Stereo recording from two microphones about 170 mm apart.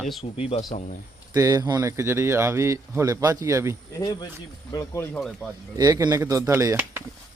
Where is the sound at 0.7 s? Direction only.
45° left (ahead or behind).